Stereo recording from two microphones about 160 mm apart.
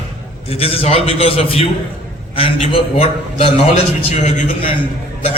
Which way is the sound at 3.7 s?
50° left (ahead or behind).